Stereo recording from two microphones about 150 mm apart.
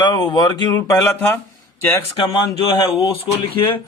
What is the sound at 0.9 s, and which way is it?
Speech, 15° left (ahead or behind).